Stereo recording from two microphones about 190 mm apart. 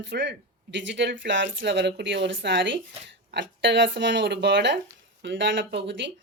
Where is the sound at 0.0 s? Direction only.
70° right (ahead or behind).